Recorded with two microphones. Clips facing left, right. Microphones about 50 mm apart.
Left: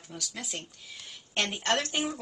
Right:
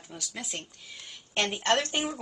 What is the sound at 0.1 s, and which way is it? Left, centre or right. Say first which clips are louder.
Speech: even; centre.